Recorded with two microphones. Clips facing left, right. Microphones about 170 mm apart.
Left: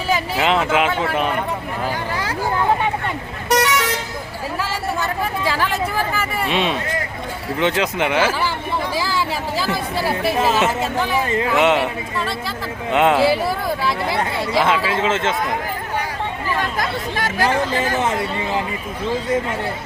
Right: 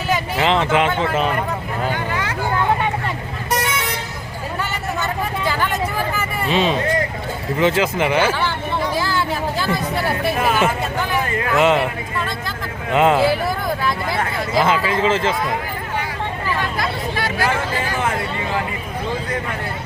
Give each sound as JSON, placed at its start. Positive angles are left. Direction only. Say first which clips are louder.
{"t": 0.1, "sound": "speech", "louder": "even", "side_deg": 5}
{"t": 1.9, "sound": "speech", "louder": "right 1 dB", "side_deg": 35}
{"t": 3.5, "sound": "vehicle", "louder": "left 5 dB", "side_deg": 80}
{"t": 5.5, "sound": "speech", "louder": "even", "side_deg": 0}
{"t": 9.0, "sound": "chatter", "louder": "right 1 dB", "side_deg": 0}
{"t": 11.5, "sound": "speech", "louder": "right 2 dB", "side_deg": 0}
{"t": 16.6, "sound": "chatter", "louder": "even", "side_deg": 45}